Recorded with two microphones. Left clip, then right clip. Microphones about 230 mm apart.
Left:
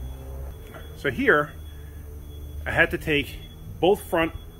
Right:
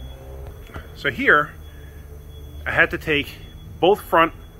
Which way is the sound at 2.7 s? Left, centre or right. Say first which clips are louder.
Right 3 dB; centre.